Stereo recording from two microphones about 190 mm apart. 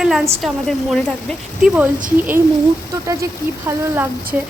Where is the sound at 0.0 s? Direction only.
Centre (ahead or behind).